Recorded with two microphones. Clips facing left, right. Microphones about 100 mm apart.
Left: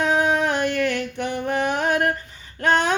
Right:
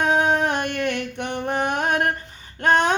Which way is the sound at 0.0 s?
30° right (ahead or behind).